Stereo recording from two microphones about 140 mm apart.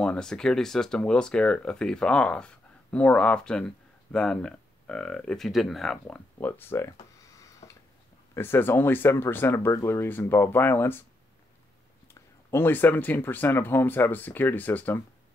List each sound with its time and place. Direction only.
0.0 s speech: 5° left (ahead or behind)
6.3 s a sound: 15° left (ahead or behind)
8.4 s speech: 15° left (ahead or behind)
12.1 s speech: 20° left (ahead or behind)